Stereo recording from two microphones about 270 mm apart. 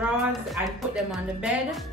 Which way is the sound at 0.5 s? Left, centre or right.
Centre.